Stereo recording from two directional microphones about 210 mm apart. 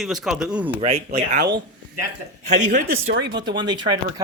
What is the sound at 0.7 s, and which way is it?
Speech, 30° right (ahead or behind).